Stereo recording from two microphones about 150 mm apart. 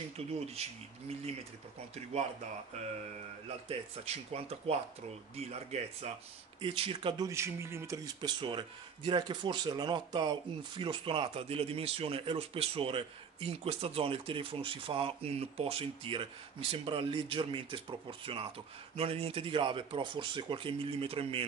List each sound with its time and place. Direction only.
0.3 s speech: 45° right (ahead or behind)
3.6 s speech: 45° right (ahead or behind)
7.2 s speech: 20° right (ahead or behind); by 21.5 s 40° right (ahead or behind)